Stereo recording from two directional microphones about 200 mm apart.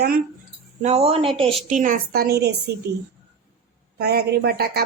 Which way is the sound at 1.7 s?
40° right (ahead or behind).